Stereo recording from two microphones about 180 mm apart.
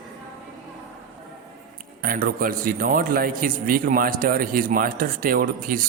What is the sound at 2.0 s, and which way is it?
A man's voice, 55° right (ahead or behind).